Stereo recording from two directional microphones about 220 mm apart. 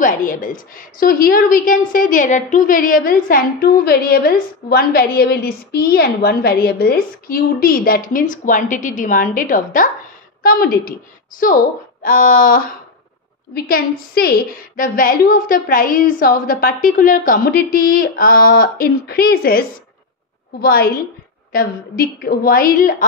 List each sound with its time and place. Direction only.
0.0 s a woman's voice: 40° left (ahead or behind)
20.6 s a woman's voice: 45° left (ahead or behind)